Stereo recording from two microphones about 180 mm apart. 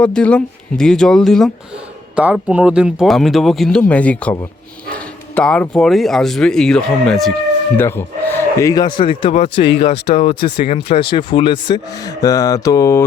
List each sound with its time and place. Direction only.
0.0 s speech: 5° left (ahead or behind)